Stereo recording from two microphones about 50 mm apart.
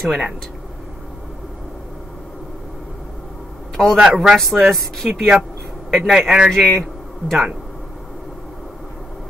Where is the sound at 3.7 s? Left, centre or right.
Centre.